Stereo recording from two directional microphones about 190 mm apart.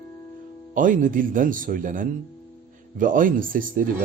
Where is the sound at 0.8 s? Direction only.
45° right (ahead or behind).